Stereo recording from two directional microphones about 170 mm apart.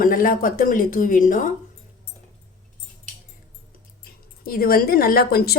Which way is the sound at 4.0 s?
60° left (ahead or behind).